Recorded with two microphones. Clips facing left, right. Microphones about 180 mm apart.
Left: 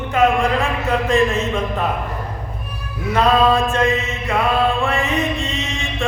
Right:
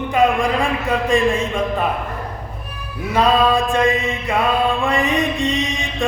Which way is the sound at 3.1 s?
15° right (ahead or behind).